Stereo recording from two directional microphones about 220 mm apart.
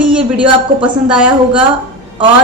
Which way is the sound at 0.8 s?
5° right (ahead or behind).